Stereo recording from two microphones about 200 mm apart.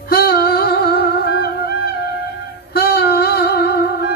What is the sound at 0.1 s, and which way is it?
Humming, 50° left (ahead or behind).